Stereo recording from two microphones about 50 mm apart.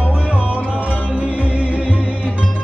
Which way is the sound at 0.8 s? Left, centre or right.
Left.